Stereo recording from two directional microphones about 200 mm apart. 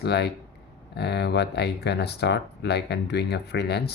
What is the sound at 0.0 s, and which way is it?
Speech, 55° left (ahead or behind).